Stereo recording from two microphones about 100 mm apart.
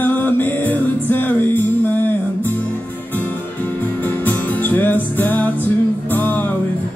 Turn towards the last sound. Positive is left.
turn(degrees=20)  # may be behind; listen again after turning